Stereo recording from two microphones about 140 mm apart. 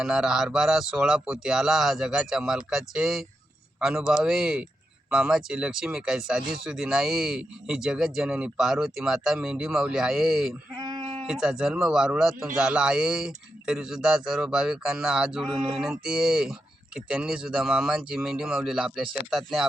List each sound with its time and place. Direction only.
0.0 s speech: 5° right (ahead or behind)
10.8 s sheep: 30° right (ahead or behind)
11.3 s speech: 5° right (ahead or behind)